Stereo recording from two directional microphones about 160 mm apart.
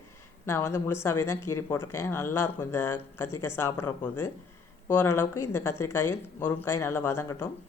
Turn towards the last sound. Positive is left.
turn(degrees=15)  # may be behind; listen again after turning